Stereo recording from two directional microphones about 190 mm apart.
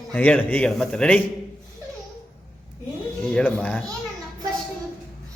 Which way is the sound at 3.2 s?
5° left (ahead or behind).